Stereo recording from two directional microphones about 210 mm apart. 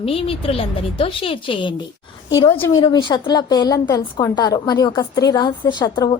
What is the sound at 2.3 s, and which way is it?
A woman's voice, 10° left (ahead or behind).